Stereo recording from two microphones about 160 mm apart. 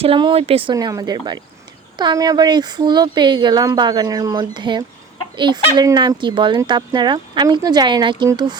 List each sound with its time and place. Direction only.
0.0 s speech: 35° right (ahead or behind)